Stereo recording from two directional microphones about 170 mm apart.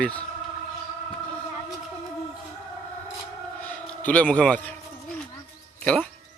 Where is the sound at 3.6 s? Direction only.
10° left (ahead or behind).